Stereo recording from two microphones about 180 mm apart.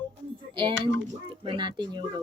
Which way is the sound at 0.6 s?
25° right (ahead or behind).